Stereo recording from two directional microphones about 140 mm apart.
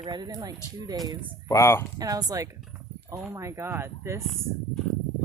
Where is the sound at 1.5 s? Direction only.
20° left (ahead or behind).